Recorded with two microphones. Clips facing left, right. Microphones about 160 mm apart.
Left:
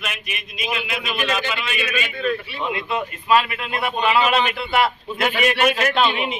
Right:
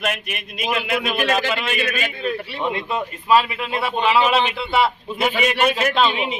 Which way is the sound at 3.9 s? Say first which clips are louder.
Right 1 dB; 5° left (ahead or behind).